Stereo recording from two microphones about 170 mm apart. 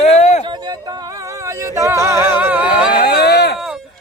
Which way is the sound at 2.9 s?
60° left (ahead or behind).